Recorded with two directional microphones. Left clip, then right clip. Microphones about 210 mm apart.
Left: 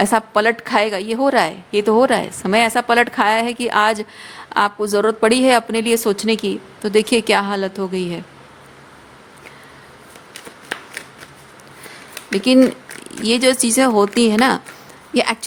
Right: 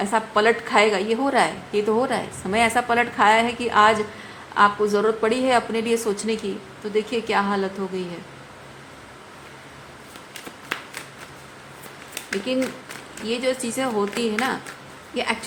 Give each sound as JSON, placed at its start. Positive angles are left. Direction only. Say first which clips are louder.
{"t": 0.0, "sound": "a woman's voice", "louder": "left 4 dB", "side_deg": 55}
{"t": 13.2, "sound": "speech", "louder": "left 9 dB", "side_deg": 60}